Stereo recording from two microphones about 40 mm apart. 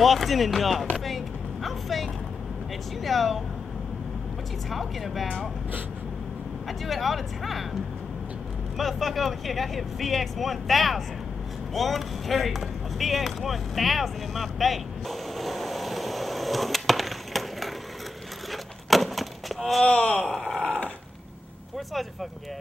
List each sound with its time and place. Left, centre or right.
0.0 s speech: centre
1.0 s a sound: centre
3.0 s speech: centre
4.6 s speech: centre
6.8 s speech: centre
8.7 s speech: centre
11.7 s chop: centre
18.5 s a sound: centre
19.9 s speech: left
20.2 s speech: centre
21.7 s speech: centre